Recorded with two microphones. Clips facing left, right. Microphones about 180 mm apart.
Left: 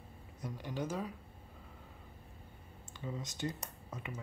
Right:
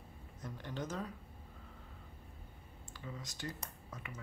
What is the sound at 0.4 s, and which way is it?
Speech, 10° left (ahead or behind).